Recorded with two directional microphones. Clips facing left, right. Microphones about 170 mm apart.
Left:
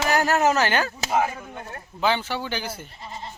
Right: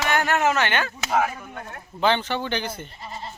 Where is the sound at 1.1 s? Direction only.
20° left (ahead or behind).